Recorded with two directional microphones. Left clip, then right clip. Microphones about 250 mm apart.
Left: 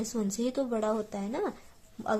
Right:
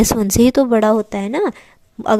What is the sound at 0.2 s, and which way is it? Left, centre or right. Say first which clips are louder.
A woman's voice: right 13 dB; right.